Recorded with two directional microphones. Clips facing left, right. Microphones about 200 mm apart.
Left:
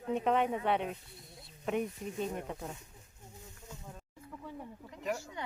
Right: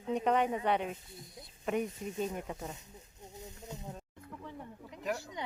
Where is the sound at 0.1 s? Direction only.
Centre (ahead or behind).